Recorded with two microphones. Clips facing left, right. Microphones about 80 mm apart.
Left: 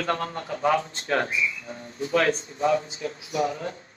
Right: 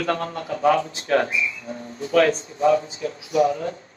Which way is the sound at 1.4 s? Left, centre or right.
Right.